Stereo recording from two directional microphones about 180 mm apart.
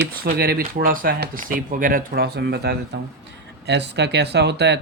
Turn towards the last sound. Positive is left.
turn(degrees=-70)  # may be behind; listen again after turning